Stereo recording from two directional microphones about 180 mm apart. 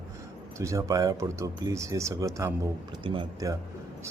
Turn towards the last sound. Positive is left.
turn(degrees=-25)  # may be behind; listen again after turning